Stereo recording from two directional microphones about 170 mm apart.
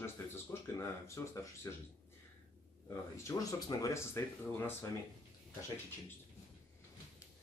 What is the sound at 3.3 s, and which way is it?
Speech, 20° left (ahead or behind).